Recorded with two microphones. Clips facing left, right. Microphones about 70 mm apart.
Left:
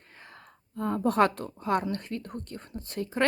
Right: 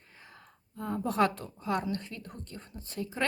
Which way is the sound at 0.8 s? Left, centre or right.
Left.